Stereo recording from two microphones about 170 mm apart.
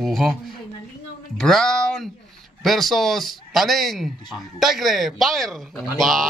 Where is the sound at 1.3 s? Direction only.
5° left (ahead or behind).